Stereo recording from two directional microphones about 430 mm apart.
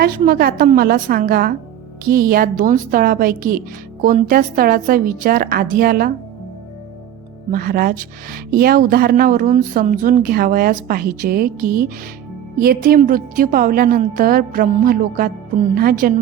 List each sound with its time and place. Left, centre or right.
0.0 s speech: centre
7.5 s speech: centre